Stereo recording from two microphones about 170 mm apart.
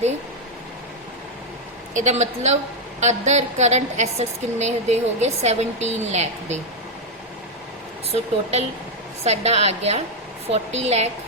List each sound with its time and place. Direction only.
1.9 s a woman's voice: 45° right (ahead or behind)
8.1 s a woman's voice: 35° right (ahead or behind)